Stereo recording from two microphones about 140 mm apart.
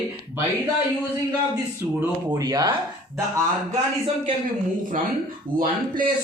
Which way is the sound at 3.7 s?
40° right (ahead or behind).